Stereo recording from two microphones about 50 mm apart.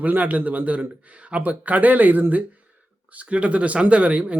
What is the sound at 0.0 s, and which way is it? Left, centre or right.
A man's voice, right.